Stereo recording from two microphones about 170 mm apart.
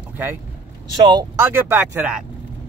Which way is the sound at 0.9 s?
25° right (ahead or behind).